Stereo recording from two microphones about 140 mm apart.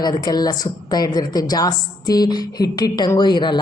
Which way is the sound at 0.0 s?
30° left (ahead or behind).